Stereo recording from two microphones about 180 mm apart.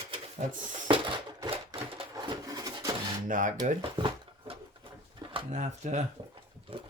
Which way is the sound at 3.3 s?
45° right (ahead or behind).